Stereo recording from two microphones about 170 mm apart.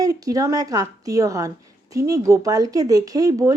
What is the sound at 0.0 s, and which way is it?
Speech, 20° right (ahead or behind).